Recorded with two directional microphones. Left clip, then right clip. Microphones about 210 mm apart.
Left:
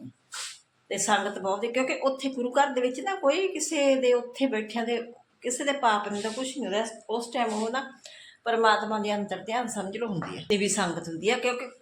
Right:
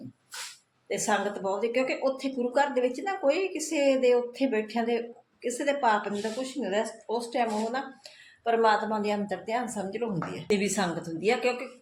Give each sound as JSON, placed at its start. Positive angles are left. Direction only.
{"t": 0.9, "sound": "a woman's voice", "side_deg": 0}
{"t": 8.4, "sound": "a woman's voice", "side_deg": -5}